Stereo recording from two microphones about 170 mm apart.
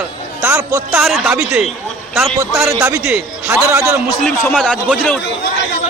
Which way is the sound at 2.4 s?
15° right (ahead or behind).